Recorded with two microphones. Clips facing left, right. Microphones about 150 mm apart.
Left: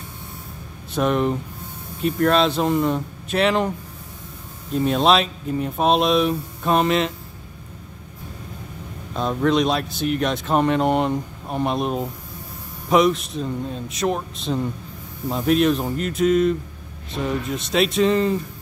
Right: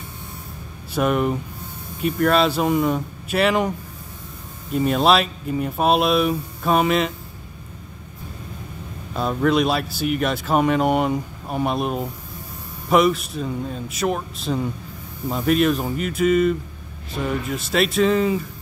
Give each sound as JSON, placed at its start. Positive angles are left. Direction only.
{"t": 0.9, "sound": "speech", "side_deg": -5}
{"t": 4.7, "sound": "speech", "side_deg": -5}
{"t": 9.1, "sound": "speech", "side_deg": -5}